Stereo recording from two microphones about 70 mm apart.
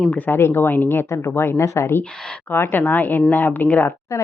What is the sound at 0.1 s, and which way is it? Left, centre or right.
Speech, left.